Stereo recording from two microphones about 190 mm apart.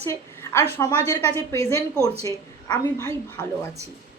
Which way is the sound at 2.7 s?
15° left (ahead or behind).